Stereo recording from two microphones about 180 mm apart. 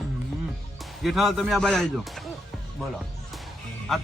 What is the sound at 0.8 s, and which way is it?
Speech, centre (ahead or behind).